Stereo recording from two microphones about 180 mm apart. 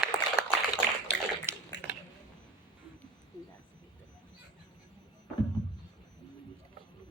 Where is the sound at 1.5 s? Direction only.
15° right (ahead or behind).